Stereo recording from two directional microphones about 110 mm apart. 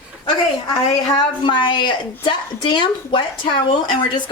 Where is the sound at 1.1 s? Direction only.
50° left (ahead or behind).